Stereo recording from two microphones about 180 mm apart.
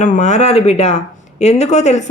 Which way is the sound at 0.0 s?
40° left (ahead or behind).